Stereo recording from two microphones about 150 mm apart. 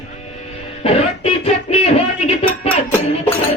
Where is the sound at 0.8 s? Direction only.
45° left (ahead or behind).